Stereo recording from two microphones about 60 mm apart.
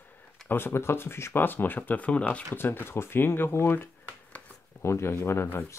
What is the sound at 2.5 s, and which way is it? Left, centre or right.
Speech, left.